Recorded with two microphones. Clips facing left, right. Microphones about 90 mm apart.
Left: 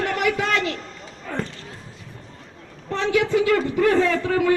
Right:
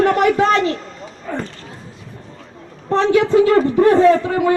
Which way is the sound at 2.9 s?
35° right (ahead or behind).